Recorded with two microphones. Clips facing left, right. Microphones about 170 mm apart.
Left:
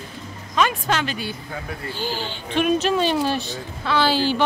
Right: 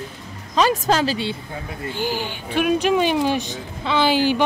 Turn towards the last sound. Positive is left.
turn(degrees=-15)  # may be behind; listen again after turning